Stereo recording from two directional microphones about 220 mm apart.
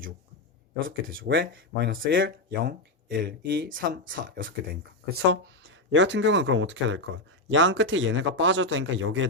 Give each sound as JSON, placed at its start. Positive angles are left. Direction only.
{"t": 1.1, "sound": "speech", "side_deg": -60}
{"t": 1.9, "sound": "speech", "side_deg": -40}
{"t": 5.3, "sound": "speech", "side_deg": -55}